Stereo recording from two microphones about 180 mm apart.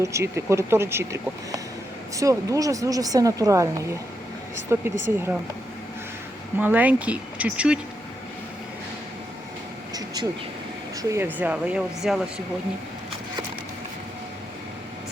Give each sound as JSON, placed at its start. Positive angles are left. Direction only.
{"t": 0.0, "sound": "speech", "side_deg": -15}
{"t": 4.7, "sound": "speech", "side_deg": -15}
{"t": 6.6, "sound": "speech", "side_deg": -10}
{"t": 11.1, "sound": "speech", "side_deg": -10}